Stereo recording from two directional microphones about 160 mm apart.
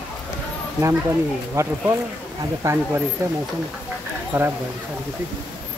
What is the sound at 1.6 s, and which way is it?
Speech, 15° right (ahead or behind).